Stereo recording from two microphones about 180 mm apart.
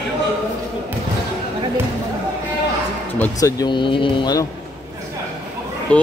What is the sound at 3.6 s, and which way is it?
Speech, 25° left (ahead or behind).